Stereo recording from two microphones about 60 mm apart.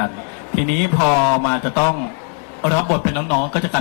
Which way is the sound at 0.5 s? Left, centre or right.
Left.